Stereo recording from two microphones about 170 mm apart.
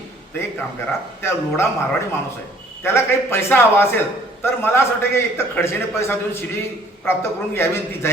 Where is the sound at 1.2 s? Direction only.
15° left (ahead or behind).